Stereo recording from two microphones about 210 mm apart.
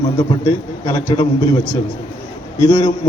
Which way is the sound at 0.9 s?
25° left (ahead or behind).